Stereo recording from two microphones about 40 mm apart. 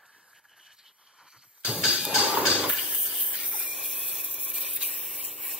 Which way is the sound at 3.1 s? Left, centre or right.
Centre.